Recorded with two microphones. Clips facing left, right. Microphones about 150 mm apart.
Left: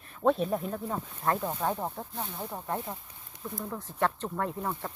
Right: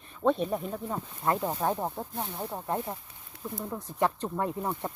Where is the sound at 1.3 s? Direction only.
15° right (ahead or behind).